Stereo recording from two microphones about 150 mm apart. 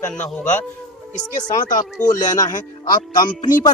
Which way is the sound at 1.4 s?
60° left (ahead or behind).